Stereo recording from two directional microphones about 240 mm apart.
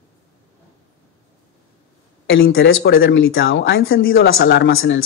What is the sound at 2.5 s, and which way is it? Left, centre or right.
Speech, left.